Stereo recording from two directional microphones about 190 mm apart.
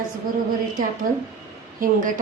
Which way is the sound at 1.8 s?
45° right (ahead or behind).